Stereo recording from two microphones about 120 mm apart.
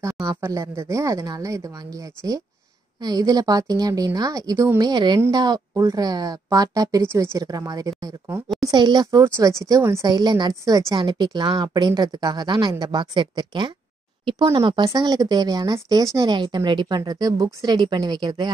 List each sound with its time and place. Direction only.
0.0 s a woman's voice: 25° right (ahead or behind)
3.0 s a woman's voice: 35° right (ahead or behind)
11.0 s a woman's voice: 40° right (ahead or behind)